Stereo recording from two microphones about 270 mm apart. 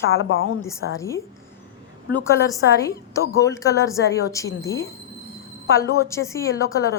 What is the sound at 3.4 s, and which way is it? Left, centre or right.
Speech, centre.